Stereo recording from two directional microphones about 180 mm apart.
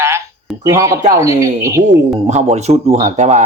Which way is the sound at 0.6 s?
15° right (ahead or behind).